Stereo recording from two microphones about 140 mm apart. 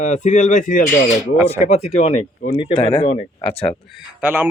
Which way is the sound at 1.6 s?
55° left (ahead or behind).